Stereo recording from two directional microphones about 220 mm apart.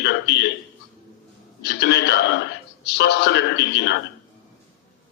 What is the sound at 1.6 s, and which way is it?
Speech, 50° left (ahead or behind).